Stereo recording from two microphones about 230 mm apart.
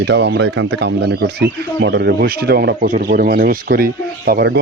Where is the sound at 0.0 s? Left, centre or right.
Right.